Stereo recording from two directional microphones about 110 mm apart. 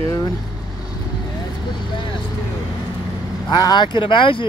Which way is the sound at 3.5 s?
40° left (ahead or behind).